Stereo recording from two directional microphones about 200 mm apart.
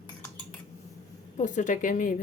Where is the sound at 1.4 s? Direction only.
40° left (ahead or behind).